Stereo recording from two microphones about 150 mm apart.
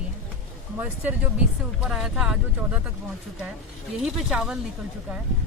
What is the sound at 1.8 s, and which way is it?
Speech, 5° right (ahead or behind).